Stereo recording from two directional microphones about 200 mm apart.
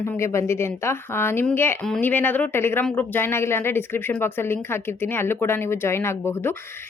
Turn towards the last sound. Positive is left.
turn(degrees=10)  # may be behind; listen again after turning